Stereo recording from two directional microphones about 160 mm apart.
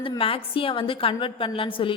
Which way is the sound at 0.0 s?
35° left (ahead or behind).